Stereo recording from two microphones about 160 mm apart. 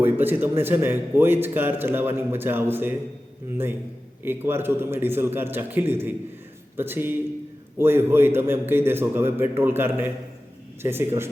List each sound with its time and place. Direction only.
0.0 s a man's voice: 10° right (ahead or behind)
4.2 s a man's voice: 15° right (ahead or behind)